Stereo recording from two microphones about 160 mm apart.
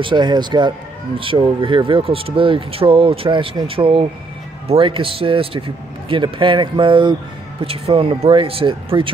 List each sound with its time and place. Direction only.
0.0 s speech: 30° right (ahead or behind)